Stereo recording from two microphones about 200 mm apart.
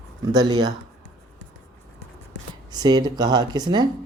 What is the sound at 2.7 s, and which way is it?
Speech, 20° right (ahead or behind).